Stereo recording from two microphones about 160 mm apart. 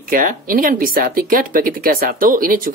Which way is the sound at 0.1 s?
60° right (ahead or behind).